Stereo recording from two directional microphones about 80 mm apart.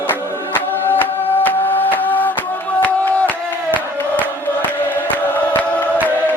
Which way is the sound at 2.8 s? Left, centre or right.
Centre.